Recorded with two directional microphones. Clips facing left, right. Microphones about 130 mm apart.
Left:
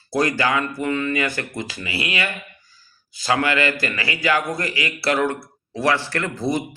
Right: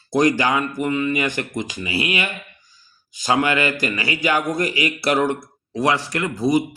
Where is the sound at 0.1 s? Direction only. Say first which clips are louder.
Right 3 dB; 20° right (ahead or behind).